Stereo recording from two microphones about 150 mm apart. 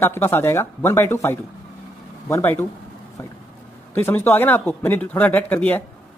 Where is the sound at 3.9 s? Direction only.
15° left (ahead or behind).